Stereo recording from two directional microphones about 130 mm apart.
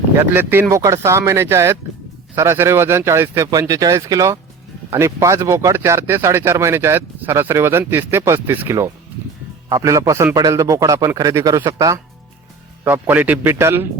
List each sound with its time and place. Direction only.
0.2 s speech: 15° right (ahead or behind)
12.8 s speech: 15° right (ahead or behind)